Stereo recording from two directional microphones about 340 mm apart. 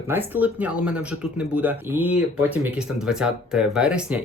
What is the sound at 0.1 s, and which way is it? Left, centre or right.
Speech, centre.